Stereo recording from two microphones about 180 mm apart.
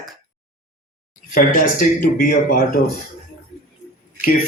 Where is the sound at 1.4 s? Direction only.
50° left (ahead or behind).